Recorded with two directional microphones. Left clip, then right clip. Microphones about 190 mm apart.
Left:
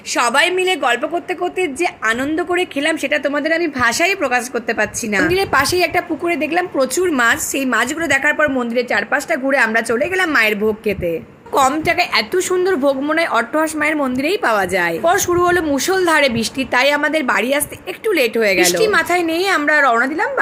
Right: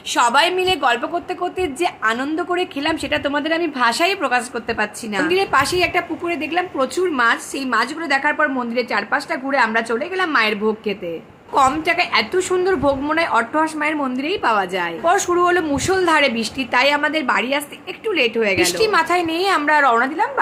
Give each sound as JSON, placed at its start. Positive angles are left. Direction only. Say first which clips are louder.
{"t": 0.1, "sound": "a woman's voice", "louder": "left 1 dB", "side_deg": 5}